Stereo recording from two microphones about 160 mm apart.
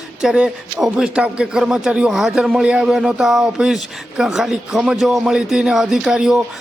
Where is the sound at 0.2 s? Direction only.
5° right (ahead or behind).